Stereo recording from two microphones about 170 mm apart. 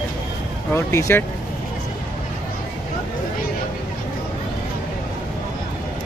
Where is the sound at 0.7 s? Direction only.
15° left (ahead or behind).